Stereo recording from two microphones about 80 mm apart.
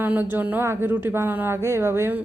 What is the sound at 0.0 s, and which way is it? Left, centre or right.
A woman's voice, right.